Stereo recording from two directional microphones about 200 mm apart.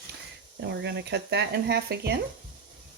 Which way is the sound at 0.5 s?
60° right (ahead or behind).